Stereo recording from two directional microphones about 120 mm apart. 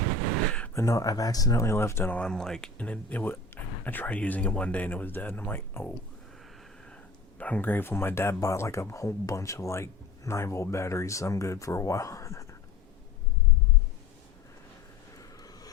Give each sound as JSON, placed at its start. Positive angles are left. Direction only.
{"t": 0.7, "sound": "speech", "side_deg": 25}
{"t": 2.1, "sound": "speech", "side_deg": 5}
{"t": 7.3, "sound": "speech", "side_deg": 10}
{"t": 15.2, "sound": "a sound", "side_deg": 30}